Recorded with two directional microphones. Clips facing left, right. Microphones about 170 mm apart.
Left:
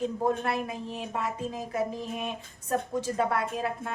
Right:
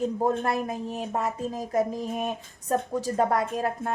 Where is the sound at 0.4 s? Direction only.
45° right (ahead or behind).